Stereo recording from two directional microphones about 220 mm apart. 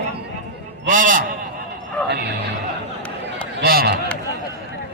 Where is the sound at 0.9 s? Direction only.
35° right (ahead or behind).